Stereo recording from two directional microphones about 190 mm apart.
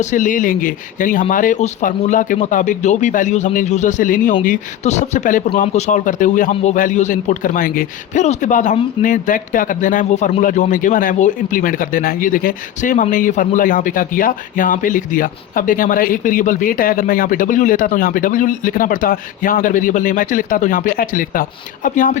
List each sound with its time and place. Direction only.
0.0 s a man's voice: 40° left (ahead or behind)